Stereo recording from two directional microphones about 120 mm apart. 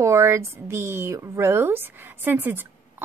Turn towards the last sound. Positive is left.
turn(degrees=-15)  # may be behind; listen again after turning